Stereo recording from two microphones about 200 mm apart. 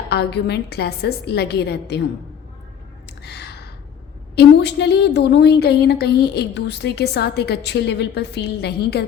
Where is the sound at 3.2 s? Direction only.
55° left (ahead or behind).